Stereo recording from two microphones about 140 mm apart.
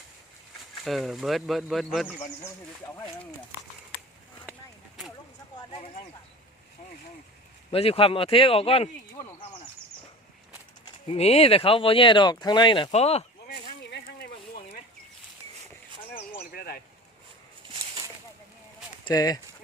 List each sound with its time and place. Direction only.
0.9 s speech: centre (ahead or behind)
5.5 s speech: 40° left (ahead or behind)
7.7 s speech: 45° left (ahead or behind)
11.1 s speech: 45° left (ahead or behind)
12.9 s speech: 50° left (ahead or behind)
16.5 s a sound: 90° left
19.0 s speech: 25° left (ahead or behind)